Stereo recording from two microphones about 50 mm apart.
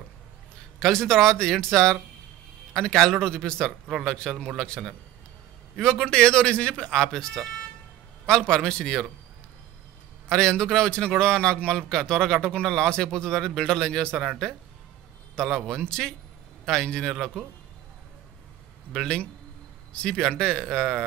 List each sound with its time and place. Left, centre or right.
0.7 s a man's voice: centre
10.2 s a man's voice: centre
18.9 s a man's voice: centre